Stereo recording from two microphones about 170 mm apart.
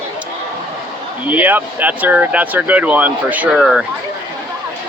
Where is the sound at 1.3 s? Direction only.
10° right (ahead or behind).